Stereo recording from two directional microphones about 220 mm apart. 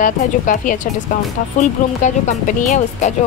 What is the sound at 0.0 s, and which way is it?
A woman's voice, 35° left (ahead or behind).